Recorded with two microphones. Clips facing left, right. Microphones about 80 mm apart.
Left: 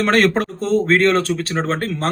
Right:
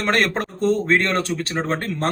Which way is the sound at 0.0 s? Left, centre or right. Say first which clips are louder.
Left 5 dB; centre.